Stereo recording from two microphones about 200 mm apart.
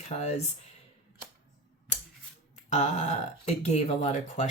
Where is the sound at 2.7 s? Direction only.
35° left (ahead or behind).